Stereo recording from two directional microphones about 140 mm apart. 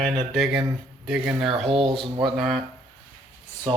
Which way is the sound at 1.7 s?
40° right (ahead or behind).